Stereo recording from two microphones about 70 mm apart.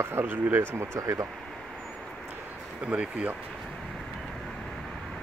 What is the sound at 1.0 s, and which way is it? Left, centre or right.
Speech, right.